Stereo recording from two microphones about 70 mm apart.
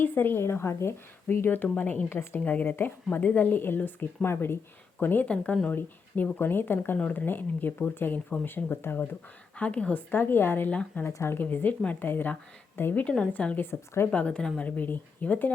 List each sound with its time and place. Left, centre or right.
0.0 s a woman's voice: left
2.4 s speech: left
5.3 s a woman's voice: centre
6.4 s speech: left
9.6 s speech: centre
10.1 s speech: left
13.7 s a woman's voice: left
14.1 s a woman's voice: centre
14.8 s speech: left